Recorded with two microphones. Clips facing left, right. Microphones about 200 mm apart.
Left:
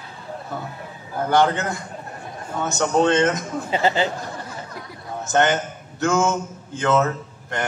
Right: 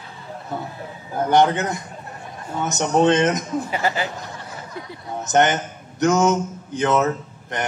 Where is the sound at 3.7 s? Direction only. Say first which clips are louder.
Left 3 dB; 25° left (ahead or behind).